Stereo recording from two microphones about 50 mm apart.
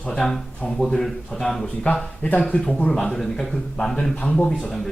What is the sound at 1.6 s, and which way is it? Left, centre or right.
Speech, left.